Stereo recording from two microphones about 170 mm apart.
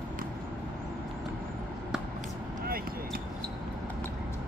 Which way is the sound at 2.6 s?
60° right (ahead or behind).